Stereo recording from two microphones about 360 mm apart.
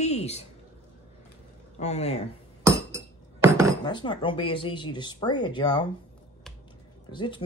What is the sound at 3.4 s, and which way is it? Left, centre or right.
Cutlery, centre.